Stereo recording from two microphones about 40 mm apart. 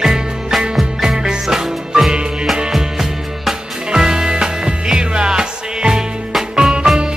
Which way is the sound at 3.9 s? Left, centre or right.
Centre.